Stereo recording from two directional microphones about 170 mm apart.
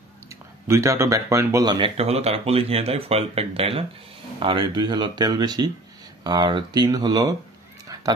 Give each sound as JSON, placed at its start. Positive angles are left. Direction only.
{"t": 0.3, "sound": "speech", "side_deg": -15}